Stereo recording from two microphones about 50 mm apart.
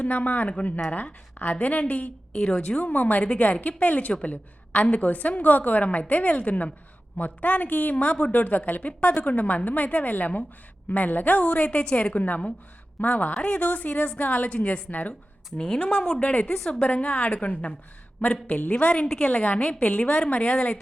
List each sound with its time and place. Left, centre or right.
0.0 s a woman's voice: left
2.3 s a woman's voice: centre
2.7 s a woman's voice: left
15.5 s speech: centre
15.8 s a woman's voice: left